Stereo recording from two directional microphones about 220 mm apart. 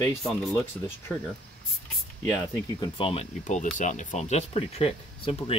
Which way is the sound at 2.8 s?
25° left (ahead or behind).